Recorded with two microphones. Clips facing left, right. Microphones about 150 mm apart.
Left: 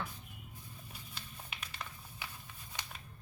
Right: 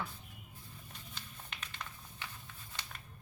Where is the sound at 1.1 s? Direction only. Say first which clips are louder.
Left 1 dB; 10° left (ahead or behind).